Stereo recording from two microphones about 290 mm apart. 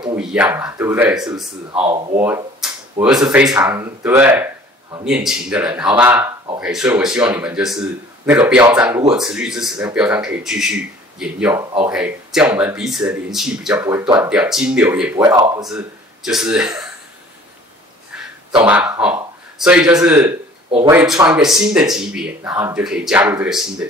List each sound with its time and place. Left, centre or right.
0.0 s speech: centre
1.7 s speech: centre
2.1 s a sound: centre
3.3 s speech: centre
15.7 s speech: centre
18.5 s speech: centre